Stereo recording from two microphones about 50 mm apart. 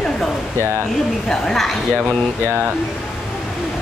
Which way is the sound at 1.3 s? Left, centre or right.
Centre.